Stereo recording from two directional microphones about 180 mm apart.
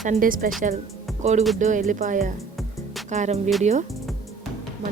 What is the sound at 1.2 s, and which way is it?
A woman's voice, 40° right (ahead or behind).